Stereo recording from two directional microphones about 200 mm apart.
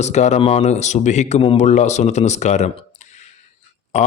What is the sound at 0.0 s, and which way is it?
Speech, 35° left (ahead or behind).